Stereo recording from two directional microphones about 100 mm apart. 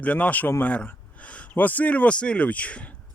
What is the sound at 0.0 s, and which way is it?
A man's voice, 15° left (ahead or behind).